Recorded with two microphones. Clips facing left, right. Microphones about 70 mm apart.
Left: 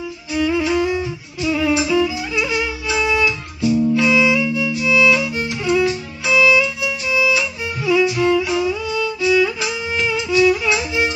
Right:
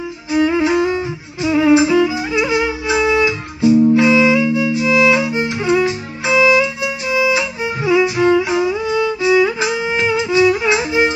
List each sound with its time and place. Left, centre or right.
0.3 s music: right